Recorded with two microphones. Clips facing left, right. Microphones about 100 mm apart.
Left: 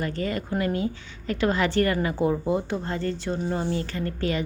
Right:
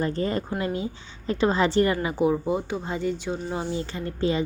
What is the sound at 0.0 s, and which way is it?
Speech, 30° right (ahead or behind).